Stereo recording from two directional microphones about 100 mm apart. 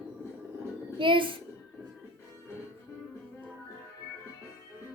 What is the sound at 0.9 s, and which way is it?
Speech, 55° right (ahead or behind).